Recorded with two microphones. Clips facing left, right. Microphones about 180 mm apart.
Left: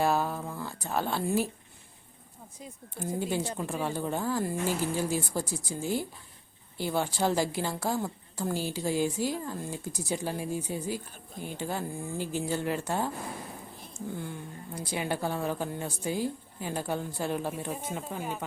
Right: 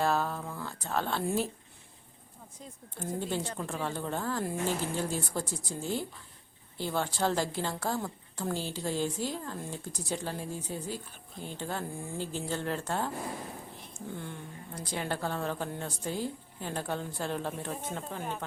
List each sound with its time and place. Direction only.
0.0 s a sound: 10° left (ahead or behind)
2.6 s a woman's voice: 10° left (ahead or behind)
14.2 s a woman's voice: 5° left (ahead or behind)